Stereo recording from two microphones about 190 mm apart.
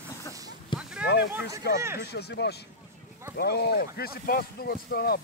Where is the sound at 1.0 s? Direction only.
65° left (ahead or behind).